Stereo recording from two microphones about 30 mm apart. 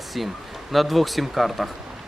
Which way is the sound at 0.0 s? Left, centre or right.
Centre.